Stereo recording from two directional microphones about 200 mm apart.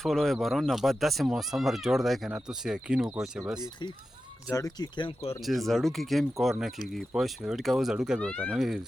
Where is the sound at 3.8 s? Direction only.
20° left (ahead or behind).